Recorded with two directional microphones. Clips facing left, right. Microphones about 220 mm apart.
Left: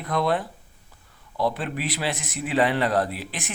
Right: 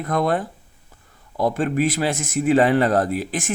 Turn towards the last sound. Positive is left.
turn(degrees=-45)  # may be behind; listen again after turning